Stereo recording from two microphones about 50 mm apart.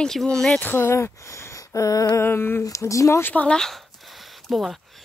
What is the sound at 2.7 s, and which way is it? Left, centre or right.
Speech, left.